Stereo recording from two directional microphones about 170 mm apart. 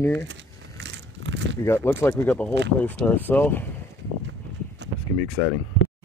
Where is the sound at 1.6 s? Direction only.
15° left (ahead or behind).